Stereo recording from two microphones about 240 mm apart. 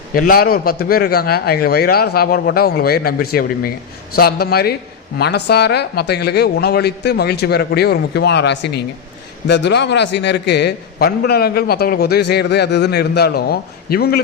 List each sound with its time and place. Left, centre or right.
0.1 s a man's voice: left